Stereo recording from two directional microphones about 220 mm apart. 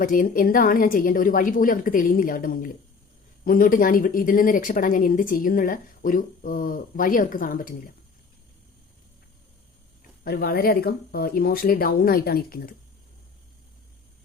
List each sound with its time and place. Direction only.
0.0 s speech: 40° left (ahead or behind)
10.2 s speech: 45° left (ahead or behind)